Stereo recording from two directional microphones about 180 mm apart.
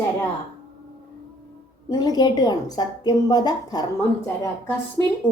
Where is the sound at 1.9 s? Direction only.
20° left (ahead or behind).